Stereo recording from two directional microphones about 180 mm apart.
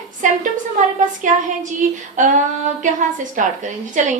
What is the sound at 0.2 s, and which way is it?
A woman's voice, 45° right (ahead or behind).